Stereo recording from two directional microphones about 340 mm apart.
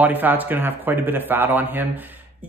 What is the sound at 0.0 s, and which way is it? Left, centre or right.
Speech, centre.